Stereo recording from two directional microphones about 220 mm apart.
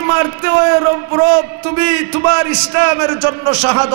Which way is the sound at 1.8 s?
15° right (ahead or behind).